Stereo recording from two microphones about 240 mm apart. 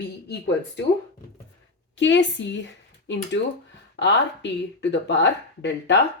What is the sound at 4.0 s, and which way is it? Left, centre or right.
Speech, left.